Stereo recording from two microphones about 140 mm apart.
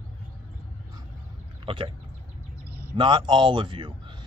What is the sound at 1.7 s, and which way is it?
Speech, 40° right (ahead or behind).